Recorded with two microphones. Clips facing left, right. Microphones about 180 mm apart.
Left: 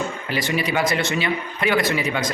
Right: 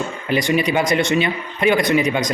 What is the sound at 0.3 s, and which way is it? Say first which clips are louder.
A man's voice: right 7 dB; 20° right (ahead or behind).